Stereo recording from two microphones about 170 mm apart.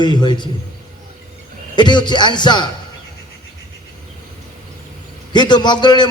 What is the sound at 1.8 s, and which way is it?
Speech, 25° left (ahead or behind).